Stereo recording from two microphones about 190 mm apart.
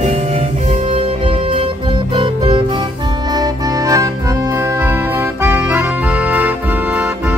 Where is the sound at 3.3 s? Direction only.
20° right (ahead or behind).